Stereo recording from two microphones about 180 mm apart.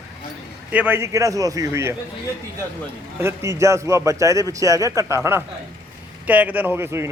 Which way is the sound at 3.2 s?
15° right (ahead or behind).